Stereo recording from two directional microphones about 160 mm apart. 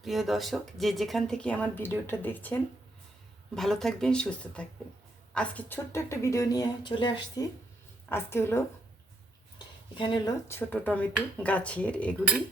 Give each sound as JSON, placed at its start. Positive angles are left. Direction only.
{"t": 0.0, "sound": "speech", "side_deg": 0}
{"t": 8.1, "sound": "speech", "side_deg": 15}
{"t": 9.6, "sound": "a sound", "side_deg": 30}
{"t": 10.5, "sound": "speech", "side_deg": 10}